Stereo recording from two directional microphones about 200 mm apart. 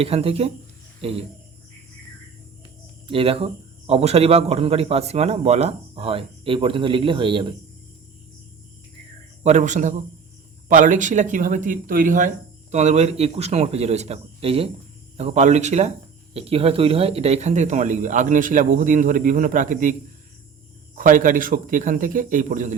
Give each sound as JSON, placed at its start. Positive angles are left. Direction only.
{"t": 0.0, "sound": "speech", "side_deg": -30}
{"t": 3.1, "sound": "speech", "side_deg": -30}
{"t": 9.4, "sound": "speech", "side_deg": -35}